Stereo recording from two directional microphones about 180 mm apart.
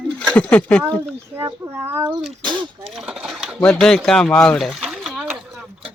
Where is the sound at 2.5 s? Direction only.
25° right (ahead or behind).